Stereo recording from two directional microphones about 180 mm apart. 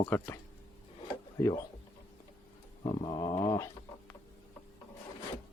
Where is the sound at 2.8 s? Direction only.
25° left (ahead or behind).